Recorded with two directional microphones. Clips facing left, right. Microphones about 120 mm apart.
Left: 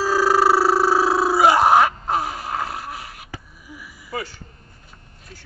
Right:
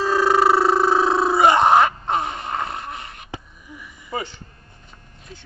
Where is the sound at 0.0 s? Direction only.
5° left (ahead or behind).